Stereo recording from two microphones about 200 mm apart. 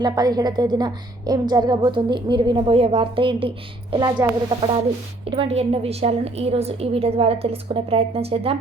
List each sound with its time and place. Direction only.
0.0 s a woman's voice: 20° right (ahead or behind)